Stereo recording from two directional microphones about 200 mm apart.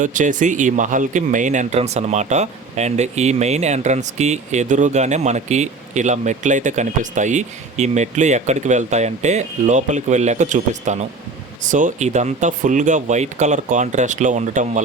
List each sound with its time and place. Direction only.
0.0 s speech: 40° right (ahead or behind)